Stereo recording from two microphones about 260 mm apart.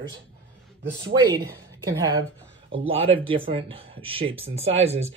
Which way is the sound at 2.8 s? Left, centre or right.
Right.